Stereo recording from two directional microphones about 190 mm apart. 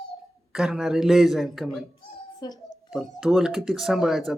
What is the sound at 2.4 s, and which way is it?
Speech, 20° left (ahead or behind).